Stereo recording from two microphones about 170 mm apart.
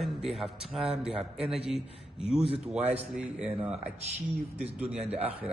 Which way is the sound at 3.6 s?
40° right (ahead or behind).